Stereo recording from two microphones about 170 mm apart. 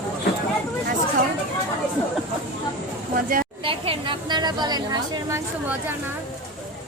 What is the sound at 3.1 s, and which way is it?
Speech, 55° right (ahead or behind).